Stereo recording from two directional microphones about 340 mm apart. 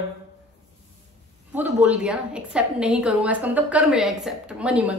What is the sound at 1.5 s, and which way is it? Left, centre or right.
A woman's voice, centre.